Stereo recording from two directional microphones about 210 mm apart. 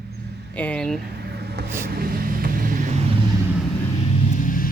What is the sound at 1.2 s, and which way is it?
Vehicle, 50° right (ahead or behind).